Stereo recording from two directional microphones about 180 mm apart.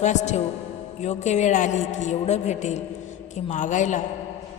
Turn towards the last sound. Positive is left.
turn(degrees=45)  # may be behind; listen again after turning